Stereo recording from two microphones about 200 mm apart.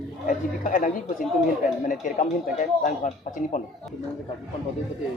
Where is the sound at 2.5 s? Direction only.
40° left (ahead or behind).